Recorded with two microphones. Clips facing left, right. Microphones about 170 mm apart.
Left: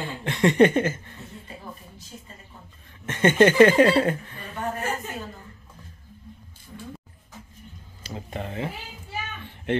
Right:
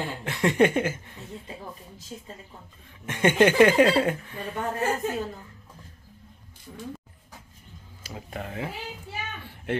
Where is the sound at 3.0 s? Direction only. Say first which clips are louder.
Left 2 dB; 10° right (ahead or behind).